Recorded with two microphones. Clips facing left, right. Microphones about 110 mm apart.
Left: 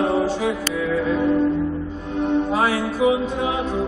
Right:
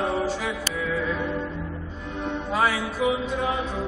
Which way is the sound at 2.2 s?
25° left (ahead or behind).